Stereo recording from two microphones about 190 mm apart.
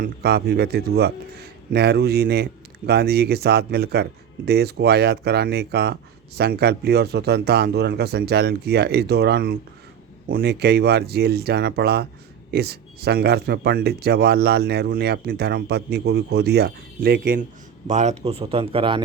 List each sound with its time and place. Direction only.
0.0 s a man's voice: 55° right (ahead or behind)
17.8 s speech: 40° right (ahead or behind)